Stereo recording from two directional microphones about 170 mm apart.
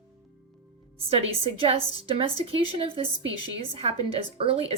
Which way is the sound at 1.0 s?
35° right (ahead or behind).